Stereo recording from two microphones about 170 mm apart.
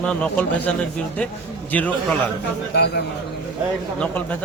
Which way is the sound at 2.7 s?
70° left (ahead or behind).